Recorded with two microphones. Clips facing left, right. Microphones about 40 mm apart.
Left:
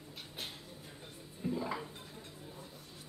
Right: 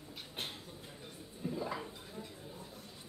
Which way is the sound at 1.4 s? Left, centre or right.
Centre.